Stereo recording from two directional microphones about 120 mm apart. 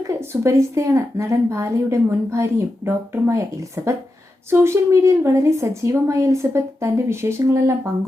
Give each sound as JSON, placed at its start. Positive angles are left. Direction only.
{"t": 0.1, "sound": "a woman's voice", "side_deg": -25}